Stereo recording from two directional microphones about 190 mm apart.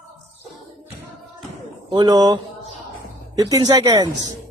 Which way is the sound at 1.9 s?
20° right (ahead or behind).